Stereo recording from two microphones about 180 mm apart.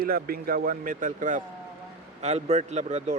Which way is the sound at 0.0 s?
55° right (ahead or behind).